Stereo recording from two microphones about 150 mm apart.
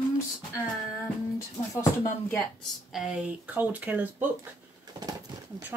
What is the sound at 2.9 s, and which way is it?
Speech, 5° right (ahead or behind).